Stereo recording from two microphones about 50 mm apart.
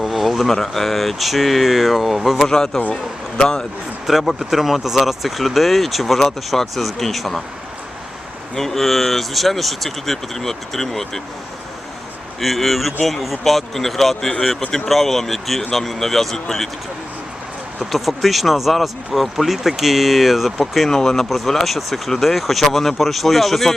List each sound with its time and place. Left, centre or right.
0.0 s speech: centre
2.5 s speech: centre
4.0 s speech: centre
8.5 s speech: centre
12.4 s speech: centre
17.9 s speech: centre
20.9 s speech: centre